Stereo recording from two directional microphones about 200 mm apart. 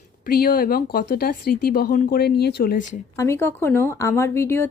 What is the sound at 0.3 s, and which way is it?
Speech, 45° left (ahead or behind).